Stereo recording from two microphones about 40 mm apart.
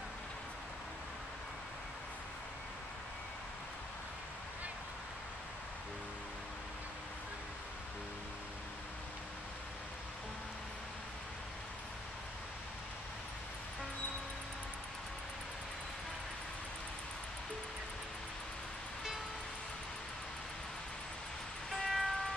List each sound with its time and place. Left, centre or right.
21.7 s vehicle: centre